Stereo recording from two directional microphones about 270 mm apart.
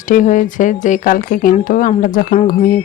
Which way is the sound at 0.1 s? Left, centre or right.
Left.